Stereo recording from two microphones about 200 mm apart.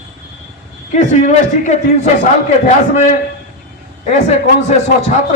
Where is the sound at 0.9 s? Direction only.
35° left (ahead or behind).